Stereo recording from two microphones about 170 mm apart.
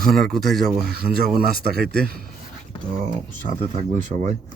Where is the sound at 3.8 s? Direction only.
45° right (ahead or behind).